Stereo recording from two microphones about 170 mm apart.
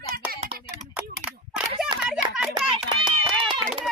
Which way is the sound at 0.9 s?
5° right (ahead or behind).